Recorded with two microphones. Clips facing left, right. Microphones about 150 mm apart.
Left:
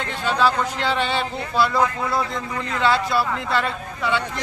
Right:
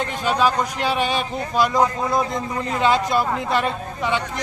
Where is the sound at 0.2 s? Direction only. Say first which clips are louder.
Even; 15° right (ahead or behind).